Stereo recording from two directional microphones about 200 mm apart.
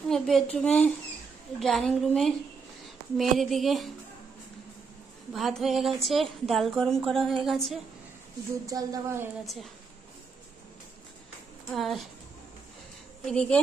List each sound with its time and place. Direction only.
0.1 s a woman's voice: 5° left (ahead or behind)
5.3 s a woman's voice: centre (ahead or behind)
8.6 s a woman's voice: 15° right (ahead or behind)
11.7 s a woman's voice: centre (ahead or behind)
13.2 s a woman's voice: 5° left (ahead or behind)